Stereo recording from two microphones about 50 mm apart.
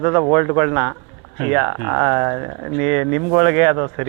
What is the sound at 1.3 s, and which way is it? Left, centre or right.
Speech, centre.